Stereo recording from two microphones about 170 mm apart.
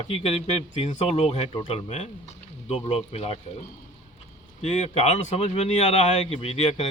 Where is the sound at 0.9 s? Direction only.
40° left (ahead or behind).